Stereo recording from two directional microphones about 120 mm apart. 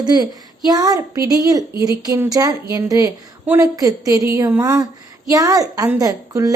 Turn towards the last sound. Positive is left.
turn(degrees=-30)  # may be behind; listen again after turning